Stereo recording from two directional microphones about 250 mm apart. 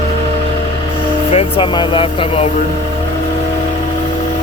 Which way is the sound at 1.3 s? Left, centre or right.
Left.